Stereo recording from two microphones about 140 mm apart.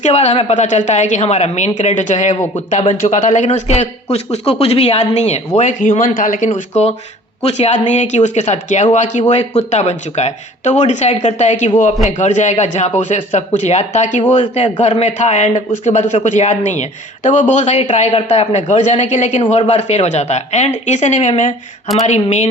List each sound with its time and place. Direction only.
0.0 s a woman's voice: 55° left (ahead or behind); by 6.5 s 70° left (ahead or behind)
6.5 s a woman's voice: 50° left (ahead or behind)
14.2 s a woman's voice: 40° left (ahead or behind); by 22.4 s 55° left (ahead or behind)